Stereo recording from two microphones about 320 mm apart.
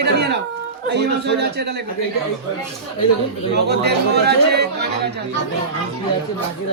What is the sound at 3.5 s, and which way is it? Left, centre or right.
Speech, right.